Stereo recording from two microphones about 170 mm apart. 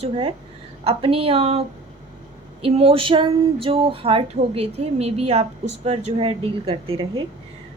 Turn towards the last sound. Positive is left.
turn(degrees=-30)  # may be behind; listen again after turning